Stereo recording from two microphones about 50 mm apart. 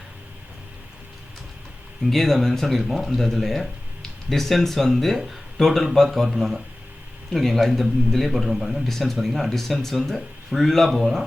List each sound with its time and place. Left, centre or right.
2.0 s speech: centre